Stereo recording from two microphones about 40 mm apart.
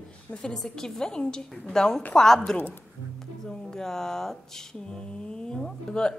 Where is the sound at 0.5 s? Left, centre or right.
Centre.